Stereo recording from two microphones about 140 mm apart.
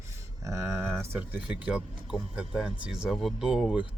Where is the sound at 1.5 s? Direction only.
5° right (ahead or behind).